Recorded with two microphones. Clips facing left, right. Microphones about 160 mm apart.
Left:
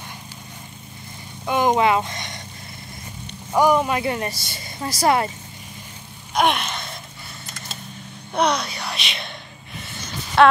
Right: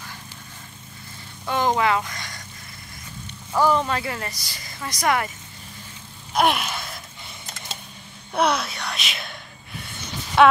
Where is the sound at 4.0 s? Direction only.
25° left (ahead or behind).